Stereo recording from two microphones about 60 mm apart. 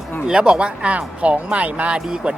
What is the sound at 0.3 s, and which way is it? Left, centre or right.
Speech, centre.